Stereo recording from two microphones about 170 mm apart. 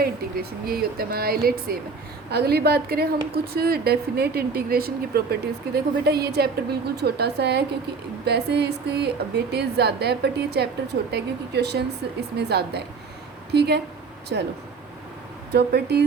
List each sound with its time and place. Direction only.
0.0 s a woman's voice: 60° right (ahead or behind); by 13.8 s 80° right
14.3 s speech: 90° right
15.5 s a woman's voice: 75° right (ahead or behind)